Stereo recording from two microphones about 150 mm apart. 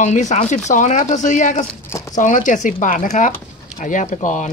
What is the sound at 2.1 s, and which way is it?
Speech, 60° left (ahead or behind).